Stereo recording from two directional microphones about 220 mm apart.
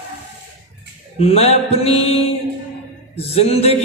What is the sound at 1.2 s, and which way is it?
A man's voice, 25° left (ahead or behind).